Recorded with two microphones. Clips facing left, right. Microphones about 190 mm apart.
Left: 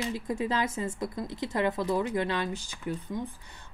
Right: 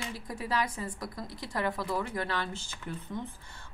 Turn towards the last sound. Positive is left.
turn(degrees=15)  # may be behind; listen again after turning